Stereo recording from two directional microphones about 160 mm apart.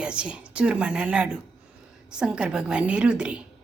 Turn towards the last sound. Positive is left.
turn(degrees=-5)  # may be behind; listen again after turning